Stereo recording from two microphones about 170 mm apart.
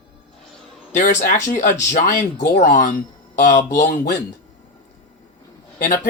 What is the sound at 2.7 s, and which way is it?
Speech, 50° left (ahead or behind).